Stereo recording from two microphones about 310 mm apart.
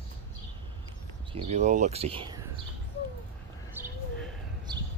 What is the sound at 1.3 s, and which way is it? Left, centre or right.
Speech, right.